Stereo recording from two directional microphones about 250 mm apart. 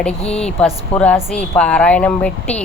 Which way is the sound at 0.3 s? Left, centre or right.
Centre.